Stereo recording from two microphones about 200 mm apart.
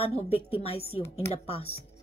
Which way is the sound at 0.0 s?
30° left (ahead or behind).